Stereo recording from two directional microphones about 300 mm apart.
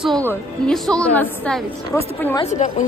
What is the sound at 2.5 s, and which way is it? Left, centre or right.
Speech, left.